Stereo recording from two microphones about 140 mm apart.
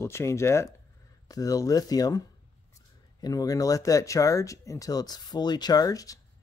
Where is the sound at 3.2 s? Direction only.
25° left (ahead or behind).